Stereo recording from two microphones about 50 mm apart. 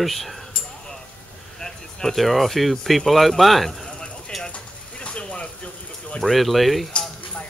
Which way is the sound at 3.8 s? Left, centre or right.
Left.